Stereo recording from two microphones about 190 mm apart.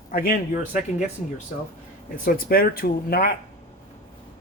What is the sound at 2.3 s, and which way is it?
Speech, 50° left (ahead or behind).